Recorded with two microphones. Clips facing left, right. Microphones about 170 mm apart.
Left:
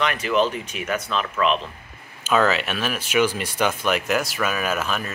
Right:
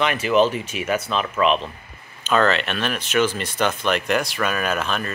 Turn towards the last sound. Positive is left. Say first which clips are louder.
# right 1 dB
turn(degrees=5)  # may be behind; listen again after turning